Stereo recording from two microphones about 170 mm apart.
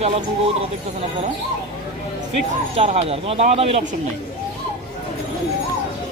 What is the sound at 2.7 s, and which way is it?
Speech, 40° right (ahead or behind).